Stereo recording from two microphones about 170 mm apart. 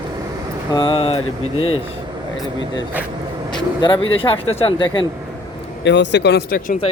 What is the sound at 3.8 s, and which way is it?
Speech, 30° left (ahead or behind).